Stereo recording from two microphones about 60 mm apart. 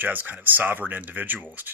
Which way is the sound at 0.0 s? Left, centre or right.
Right.